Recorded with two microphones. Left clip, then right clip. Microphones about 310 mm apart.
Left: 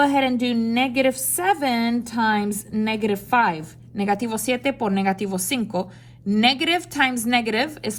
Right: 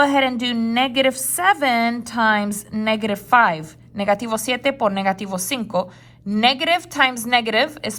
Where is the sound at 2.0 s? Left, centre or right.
Right.